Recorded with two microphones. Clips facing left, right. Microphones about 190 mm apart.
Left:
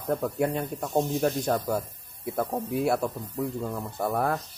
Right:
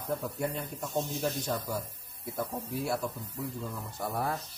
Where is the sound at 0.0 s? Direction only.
55° left (ahead or behind).